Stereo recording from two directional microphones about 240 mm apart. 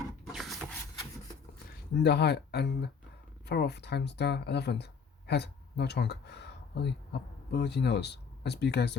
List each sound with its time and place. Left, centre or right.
0.3 s printer: centre
2.0 s speech: left